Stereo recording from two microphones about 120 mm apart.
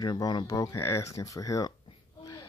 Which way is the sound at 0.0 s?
30° left (ahead or behind).